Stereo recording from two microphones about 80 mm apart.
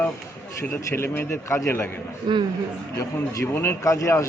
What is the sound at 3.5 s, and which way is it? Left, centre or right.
Speech, left.